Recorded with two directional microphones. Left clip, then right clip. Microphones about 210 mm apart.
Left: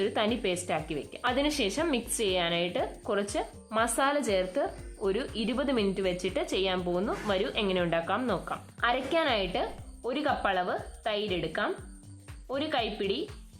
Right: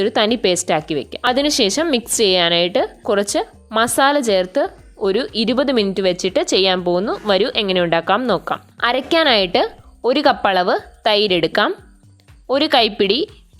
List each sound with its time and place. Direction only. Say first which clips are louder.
0.0 s a woman's voice: right 13 dB; 35° right (ahead or behind)